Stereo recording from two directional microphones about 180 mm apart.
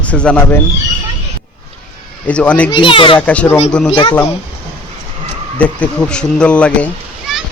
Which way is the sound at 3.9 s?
30° left (ahead or behind).